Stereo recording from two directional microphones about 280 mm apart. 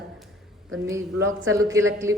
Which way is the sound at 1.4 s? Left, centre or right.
Centre.